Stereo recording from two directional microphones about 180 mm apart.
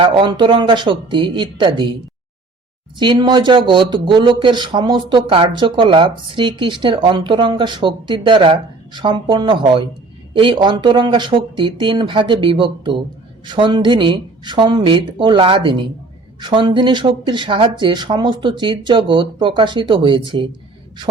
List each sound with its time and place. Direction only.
0.0 s a man's voice: 25° right (ahead or behind)
3.0 s a man's voice: 25° right (ahead or behind)